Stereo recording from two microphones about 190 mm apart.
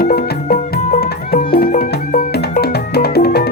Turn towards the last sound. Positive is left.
turn(degrees=55)  # may be behind; listen again after turning